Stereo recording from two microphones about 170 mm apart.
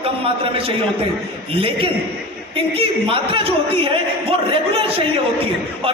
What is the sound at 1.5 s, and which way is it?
A man's voice, 35° right (ahead or behind).